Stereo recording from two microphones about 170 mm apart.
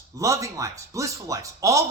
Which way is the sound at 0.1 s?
20° right (ahead or behind).